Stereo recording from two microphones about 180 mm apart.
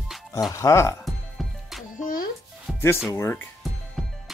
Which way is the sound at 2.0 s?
50° left (ahead or behind).